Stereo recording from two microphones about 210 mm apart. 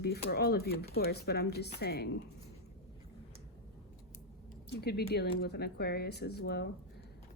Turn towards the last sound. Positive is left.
turn(degrees=50)  # may be behind; listen again after turning